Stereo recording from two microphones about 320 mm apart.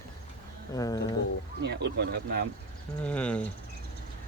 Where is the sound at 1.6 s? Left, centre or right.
Right.